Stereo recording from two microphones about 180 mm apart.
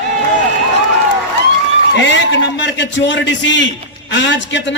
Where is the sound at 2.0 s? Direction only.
80° left.